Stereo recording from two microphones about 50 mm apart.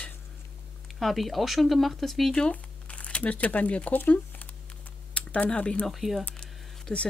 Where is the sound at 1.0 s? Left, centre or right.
Centre.